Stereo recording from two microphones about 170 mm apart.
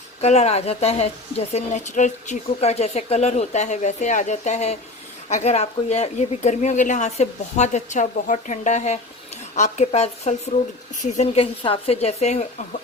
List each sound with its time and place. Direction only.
0.2 s speech: 40° left (ahead or behind)